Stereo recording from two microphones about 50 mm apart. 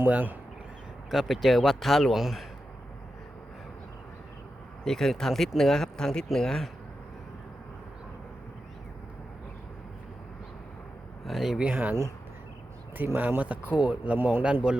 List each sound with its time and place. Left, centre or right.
0.1 s speech: right
1.1 s speech: centre
4.9 s speech: centre
11.3 s speech: centre
11.7 s speech: right
13.1 s a man's voice: right